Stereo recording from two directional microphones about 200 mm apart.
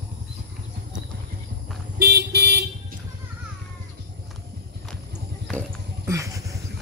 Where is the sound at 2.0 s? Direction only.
55° right (ahead or behind).